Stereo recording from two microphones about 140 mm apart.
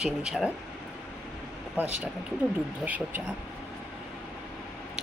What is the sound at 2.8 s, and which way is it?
Speech, 10° right (ahead or behind).